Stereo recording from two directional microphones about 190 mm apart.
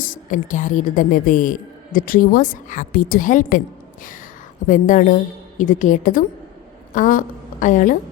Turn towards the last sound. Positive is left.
turn(degrees=45)  # may be behind; listen again after turning